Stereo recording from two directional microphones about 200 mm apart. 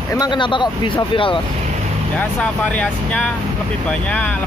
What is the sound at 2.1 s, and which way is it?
Speech, 5° left (ahead or behind).